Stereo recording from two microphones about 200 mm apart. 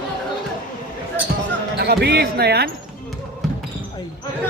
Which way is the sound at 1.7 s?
55° right (ahead or behind).